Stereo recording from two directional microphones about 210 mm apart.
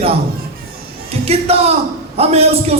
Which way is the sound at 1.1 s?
30° right (ahead or behind).